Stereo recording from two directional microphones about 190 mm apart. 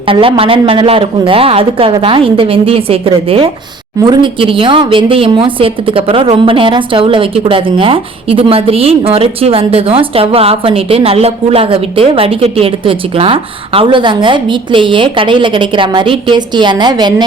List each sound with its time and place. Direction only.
0.1 s speech: 30° right (ahead or behind)